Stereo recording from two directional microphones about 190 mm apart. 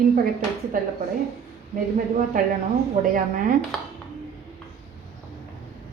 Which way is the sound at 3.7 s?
Centre (ahead or behind).